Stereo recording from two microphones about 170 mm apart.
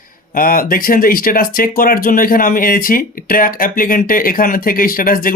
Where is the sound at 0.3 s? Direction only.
55° left (ahead or behind).